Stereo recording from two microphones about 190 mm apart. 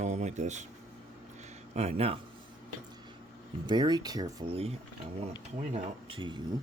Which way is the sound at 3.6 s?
25° right (ahead or behind).